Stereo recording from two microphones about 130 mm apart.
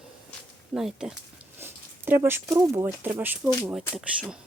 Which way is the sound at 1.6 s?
15° right (ahead or behind).